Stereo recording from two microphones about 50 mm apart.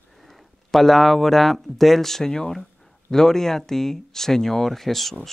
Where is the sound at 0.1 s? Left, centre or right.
Centre.